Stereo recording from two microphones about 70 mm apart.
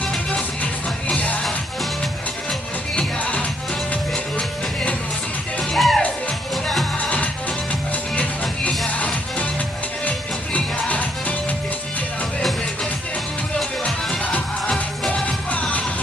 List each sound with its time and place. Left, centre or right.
1.0 s music: centre
3.0 s music: centre
7.0 s music: centre
13.6 s music: centre